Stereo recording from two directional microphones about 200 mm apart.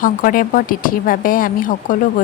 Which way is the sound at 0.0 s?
45° left (ahead or behind).